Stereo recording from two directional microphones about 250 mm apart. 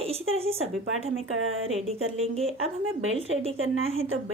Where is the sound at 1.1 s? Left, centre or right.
Right.